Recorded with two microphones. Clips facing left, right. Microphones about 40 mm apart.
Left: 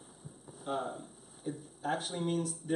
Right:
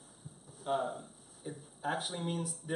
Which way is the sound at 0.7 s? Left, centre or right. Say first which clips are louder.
Right 2 dB; centre.